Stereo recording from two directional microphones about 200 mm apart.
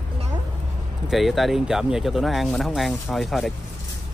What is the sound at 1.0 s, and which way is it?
Speech, centre (ahead or behind).